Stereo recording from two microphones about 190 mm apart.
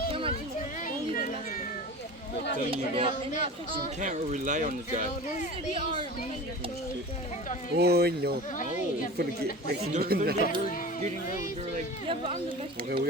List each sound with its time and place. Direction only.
0.1 s a sound: 30° right (ahead or behind)
0.9 s children playing: 45° left (ahead or behind)
2.6 s speech: 30° right (ahead or behind)
4.0 s speech: 40° right (ahead or behind)
5.7 s speech: 25° right (ahead or behind)
7.8 s speech: 55° right (ahead or behind)